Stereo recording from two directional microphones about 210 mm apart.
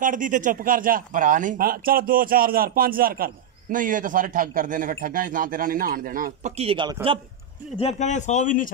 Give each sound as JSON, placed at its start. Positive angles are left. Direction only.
{"t": 0.0, "sound": "a man's voice", "side_deg": -40}
{"t": 7.7, "sound": "a man's voice", "side_deg": 30}